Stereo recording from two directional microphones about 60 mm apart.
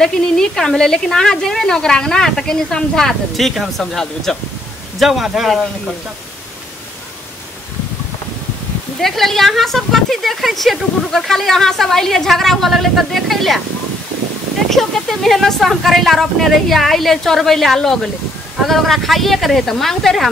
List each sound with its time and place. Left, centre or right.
0.0 s a woman's voice: centre
9.0 s speech: centre
14.7 s speech: centre